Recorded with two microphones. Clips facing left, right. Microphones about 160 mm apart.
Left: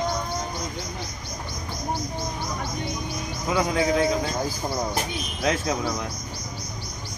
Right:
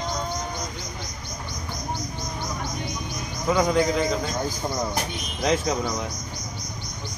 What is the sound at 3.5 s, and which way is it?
Speech, 5° left (ahead or behind).